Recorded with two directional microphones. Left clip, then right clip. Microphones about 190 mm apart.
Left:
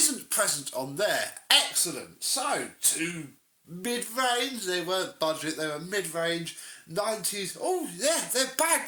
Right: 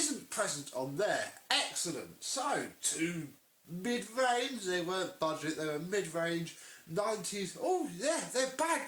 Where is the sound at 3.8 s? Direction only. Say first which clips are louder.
Left 4 dB; 40° left (ahead or behind).